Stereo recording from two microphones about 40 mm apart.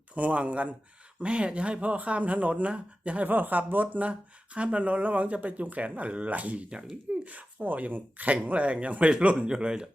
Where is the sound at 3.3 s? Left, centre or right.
Right.